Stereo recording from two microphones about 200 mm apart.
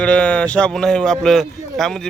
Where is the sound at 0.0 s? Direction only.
5° left (ahead or behind).